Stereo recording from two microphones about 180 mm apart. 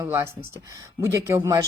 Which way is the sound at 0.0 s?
15° right (ahead or behind).